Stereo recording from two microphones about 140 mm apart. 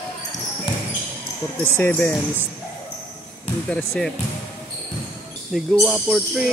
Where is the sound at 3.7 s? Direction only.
5° left (ahead or behind).